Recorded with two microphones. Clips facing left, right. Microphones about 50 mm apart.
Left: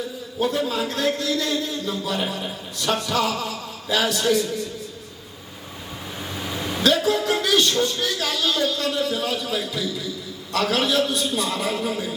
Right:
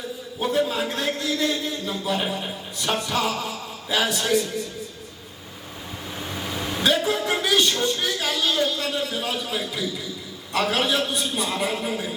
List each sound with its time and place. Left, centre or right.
0.3 s a man's voice: centre
6.1 s vehicle: centre
6.8 s a man's voice: centre